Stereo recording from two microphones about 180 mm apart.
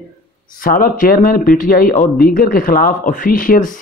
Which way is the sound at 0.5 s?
50° left (ahead or behind).